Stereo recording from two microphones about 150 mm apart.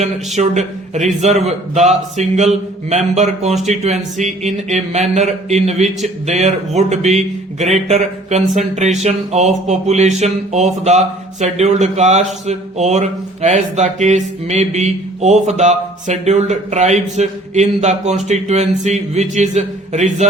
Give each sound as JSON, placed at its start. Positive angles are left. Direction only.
{"t": 0.3, "sound": "speech", "side_deg": -50}